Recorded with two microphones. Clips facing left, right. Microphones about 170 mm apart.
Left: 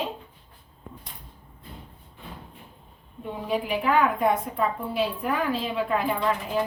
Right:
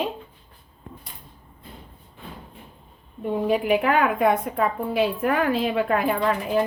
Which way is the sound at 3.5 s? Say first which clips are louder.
Right 3 dB; 60° right (ahead or behind).